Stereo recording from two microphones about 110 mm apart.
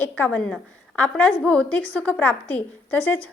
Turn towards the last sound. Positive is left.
turn(degrees=15)  # may be behind; listen again after turning